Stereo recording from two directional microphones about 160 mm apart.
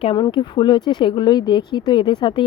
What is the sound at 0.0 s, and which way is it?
Speech, 30° left (ahead or behind).